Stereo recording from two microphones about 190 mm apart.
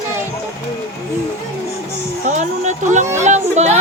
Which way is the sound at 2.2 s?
40° right (ahead or behind).